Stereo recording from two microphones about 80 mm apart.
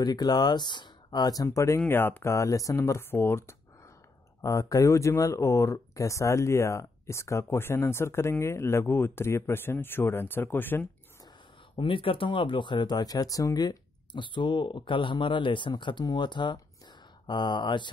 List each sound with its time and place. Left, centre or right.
0.0 s speech: left
1.9 s speech: left
2.3 s speech: left
4.4 s speech: left
11.8 s speech: left
14.1 s speech: left
16.5 s a sound: left